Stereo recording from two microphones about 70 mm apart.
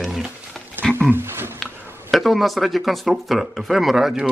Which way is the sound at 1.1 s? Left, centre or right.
Right.